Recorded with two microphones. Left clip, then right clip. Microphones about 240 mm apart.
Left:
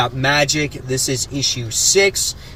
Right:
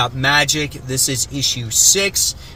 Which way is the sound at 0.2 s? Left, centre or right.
Centre.